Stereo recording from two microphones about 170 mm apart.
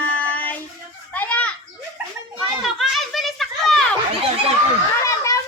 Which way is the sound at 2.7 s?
Centre (ahead or behind).